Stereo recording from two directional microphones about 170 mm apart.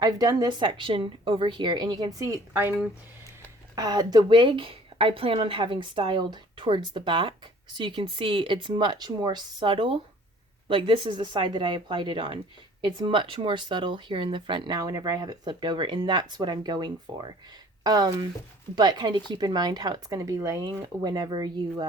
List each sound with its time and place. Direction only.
0.0 s speech: 25° right (ahead or behind)
3.8 s speech: 25° right (ahead or behind)